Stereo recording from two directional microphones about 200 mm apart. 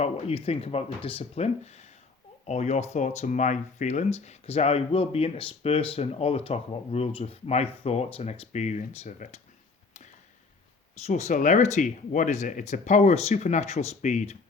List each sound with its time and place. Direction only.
0.0 s speech: 30° left (ahead or behind)
11.0 s speech: 35° left (ahead or behind)